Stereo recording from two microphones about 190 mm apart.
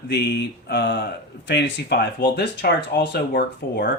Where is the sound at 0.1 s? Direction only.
60° left (ahead or behind).